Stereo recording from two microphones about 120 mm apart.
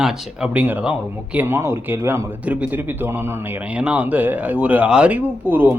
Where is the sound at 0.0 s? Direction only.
10° right (ahead or behind).